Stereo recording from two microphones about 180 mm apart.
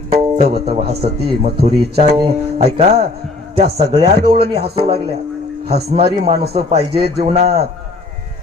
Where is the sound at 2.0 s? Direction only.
30° right (ahead or behind).